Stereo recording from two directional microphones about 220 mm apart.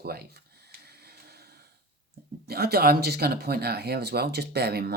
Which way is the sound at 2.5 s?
45° right (ahead or behind).